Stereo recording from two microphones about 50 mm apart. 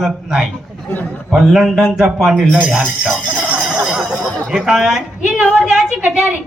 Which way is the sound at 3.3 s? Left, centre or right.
Right.